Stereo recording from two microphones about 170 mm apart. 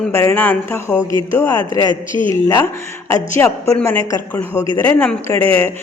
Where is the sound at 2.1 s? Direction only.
30° right (ahead or behind).